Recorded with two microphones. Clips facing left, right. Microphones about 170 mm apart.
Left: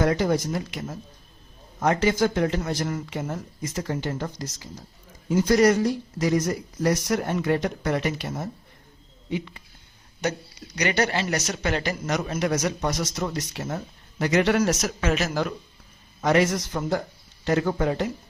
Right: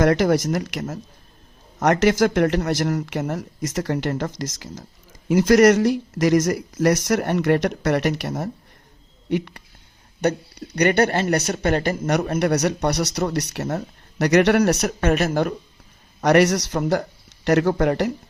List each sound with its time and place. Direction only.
0.0 s a man's voice: 85° right; by 15.4 s 55° right (ahead or behind)
16.2 s speech: 75° right (ahead or behind)